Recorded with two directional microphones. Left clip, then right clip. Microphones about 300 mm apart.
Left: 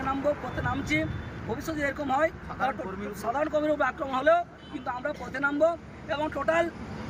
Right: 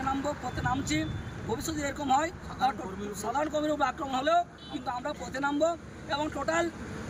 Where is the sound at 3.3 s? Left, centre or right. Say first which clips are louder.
Left 3 dB; centre.